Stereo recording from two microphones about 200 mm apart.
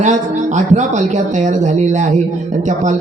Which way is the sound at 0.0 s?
35° right (ahead or behind).